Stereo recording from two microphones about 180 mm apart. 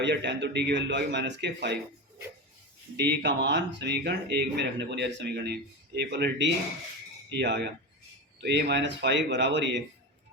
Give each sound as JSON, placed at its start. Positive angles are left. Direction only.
{"t": 0.0, "sound": "speech", "side_deg": -75}
{"t": 3.0, "sound": "speech", "side_deg": -70}